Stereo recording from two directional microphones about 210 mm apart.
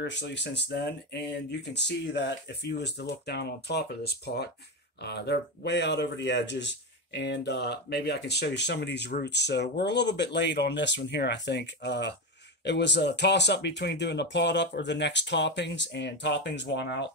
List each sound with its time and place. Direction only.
0.0 s speech: 55° left (ahead or behind)